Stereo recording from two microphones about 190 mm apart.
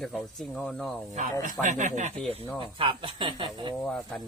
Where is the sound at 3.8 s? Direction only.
Centre (ahead or behind).